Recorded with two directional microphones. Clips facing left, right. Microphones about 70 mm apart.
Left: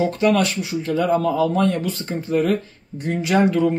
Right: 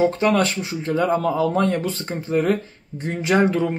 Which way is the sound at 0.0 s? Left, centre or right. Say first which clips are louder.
Even; right.